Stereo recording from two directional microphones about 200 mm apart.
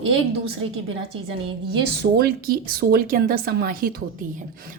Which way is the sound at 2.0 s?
50° right (ahead or behind).